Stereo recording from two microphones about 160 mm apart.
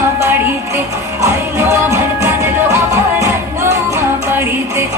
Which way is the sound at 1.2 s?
20° right (ahead or behind).